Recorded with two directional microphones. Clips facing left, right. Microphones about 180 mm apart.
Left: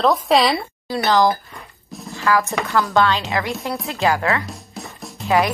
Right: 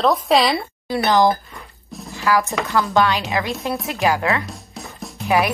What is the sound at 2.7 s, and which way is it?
A woman's voice, 20° right (ahead or behind).